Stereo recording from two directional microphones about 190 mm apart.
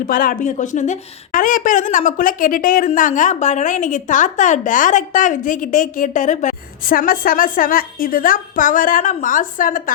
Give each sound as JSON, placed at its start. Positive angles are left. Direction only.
{"t": 0.1, "sound": "a woman's voice", "side_deg": 50}